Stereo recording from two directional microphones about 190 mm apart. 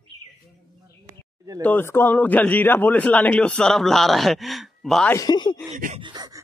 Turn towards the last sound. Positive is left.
turn(degrees=-20)  # may be behind; listen again after turning